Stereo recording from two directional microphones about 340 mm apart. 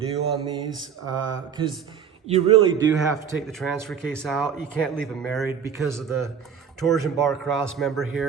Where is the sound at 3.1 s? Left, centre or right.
Centre.